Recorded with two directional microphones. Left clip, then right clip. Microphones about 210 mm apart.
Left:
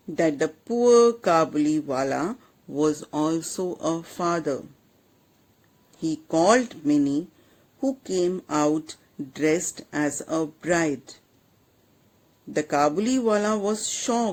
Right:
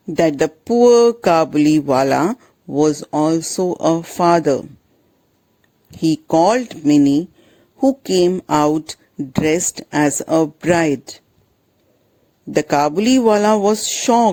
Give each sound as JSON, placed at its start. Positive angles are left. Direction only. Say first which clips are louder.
{"t": 0.1, "sound": "speech", "louder": "right 8 dB", "side_deg": -40}
{"t": 2.3, "sound": "speech", "louder": "right 11 dB", "side_deg": -30}
{"t": 5.9, "sound": "speech", "louder": "right 10 dB", "side_deg": -40}
{"t": 12.5, "sound": "speech", "louder": "right 7 dB", "side_deg": -40}